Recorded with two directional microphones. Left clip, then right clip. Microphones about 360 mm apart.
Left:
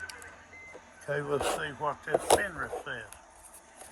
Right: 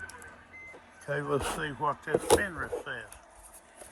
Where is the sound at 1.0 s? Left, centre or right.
Centre.